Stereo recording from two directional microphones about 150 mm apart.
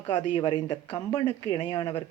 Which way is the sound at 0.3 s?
30° left (ahead or behind).